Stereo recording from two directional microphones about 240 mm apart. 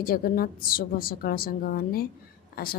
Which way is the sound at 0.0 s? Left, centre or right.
Left.